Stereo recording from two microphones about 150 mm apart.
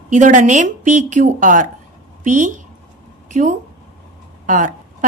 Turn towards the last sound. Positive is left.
turn(degrees=-60)  # may be behind; listen again after turning